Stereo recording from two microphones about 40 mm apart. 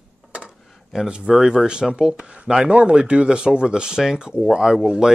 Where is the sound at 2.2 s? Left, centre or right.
Right.